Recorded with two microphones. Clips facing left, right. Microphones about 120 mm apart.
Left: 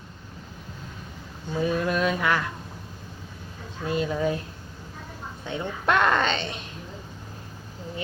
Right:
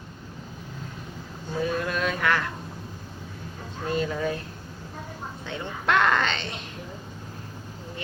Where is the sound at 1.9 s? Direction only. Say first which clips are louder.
Left 2 dB; 15° left (ahead or behind).